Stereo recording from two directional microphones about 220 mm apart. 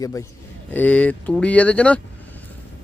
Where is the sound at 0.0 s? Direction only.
15° left (ahead or behind).